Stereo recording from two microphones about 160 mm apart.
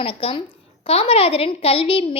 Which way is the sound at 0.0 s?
35° left (ahead or behind).